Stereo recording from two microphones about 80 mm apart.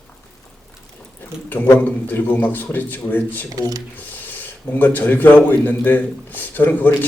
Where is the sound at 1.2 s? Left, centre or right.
Left.